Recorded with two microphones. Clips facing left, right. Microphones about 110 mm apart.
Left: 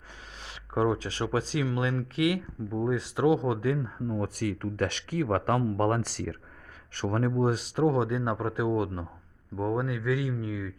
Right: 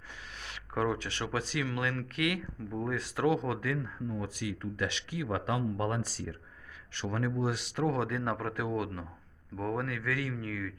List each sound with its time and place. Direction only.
0.4 s speech: 30° left (ahead or behind)
4.4 s speech: 55° left (ahead or behind); by 6.3 s 75° left (ahead or behind)
6.9 s speech: 50° left (ahead or behind)
7.3 s speech: 40° left (ahead or behind); by 10.8 s 20° left (ahead or behind)